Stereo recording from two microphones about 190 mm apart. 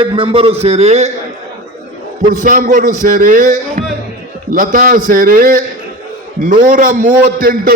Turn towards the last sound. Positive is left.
turn(degrees=-50)  # may be behind; listen again after turning